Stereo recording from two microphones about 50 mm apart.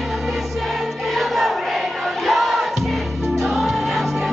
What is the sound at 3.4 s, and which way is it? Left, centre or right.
Music, centre.